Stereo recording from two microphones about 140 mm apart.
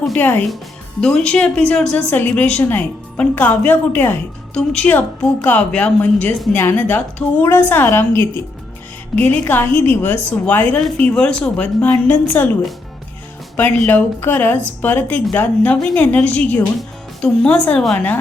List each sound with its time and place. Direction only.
0.0 s a woman's voice: 10° left (ahead or behind)
13.6 s a woman's voice: 10° left (ahead or behind)